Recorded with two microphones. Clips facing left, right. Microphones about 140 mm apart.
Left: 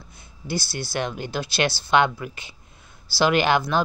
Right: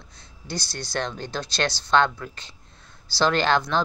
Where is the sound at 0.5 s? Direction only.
5° left (ahead or behind).